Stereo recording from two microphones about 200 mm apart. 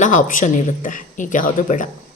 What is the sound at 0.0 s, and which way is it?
Speech, 40° left (ahead or behind).